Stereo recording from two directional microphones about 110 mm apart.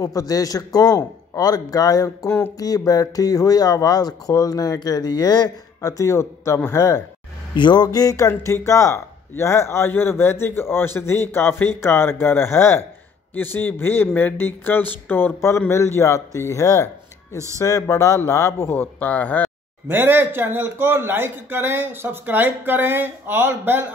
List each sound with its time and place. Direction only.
0.0 s speech: 35° left (ahead or behind)
7.5 s a man's voice: 40° left (ahead or behind); by 19.5 s 15° left (ahead or behind)
19.9 s a man's voice: 20° right (ahead or behind)